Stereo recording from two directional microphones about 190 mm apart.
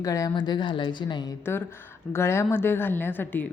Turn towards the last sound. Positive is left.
turn(degrees=10)  # may be behind; listen again after turning